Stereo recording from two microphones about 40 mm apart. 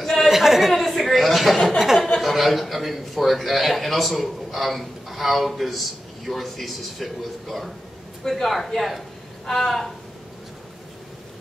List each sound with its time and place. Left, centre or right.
0.0 s chuckle: centre
0.3 s chatter: centre
2.1 s a man's voice: centre